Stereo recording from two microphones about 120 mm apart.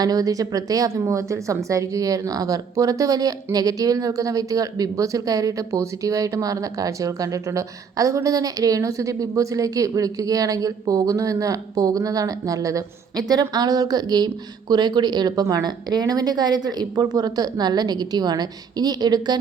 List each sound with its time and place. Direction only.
0.0 s a woman's voice: 30° right (ahead or behind)